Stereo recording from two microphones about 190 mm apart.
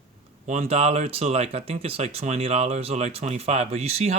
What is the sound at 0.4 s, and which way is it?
Speech, 35° right (ahead or behind).